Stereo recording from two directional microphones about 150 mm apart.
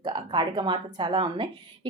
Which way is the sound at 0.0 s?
30° right (ahead or behind).